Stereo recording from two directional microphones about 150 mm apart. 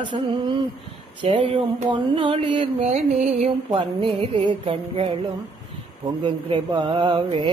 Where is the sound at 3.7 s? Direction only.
30° right (ahead or behind).